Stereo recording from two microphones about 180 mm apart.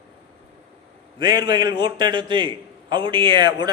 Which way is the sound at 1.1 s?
25° right (ahead or behind).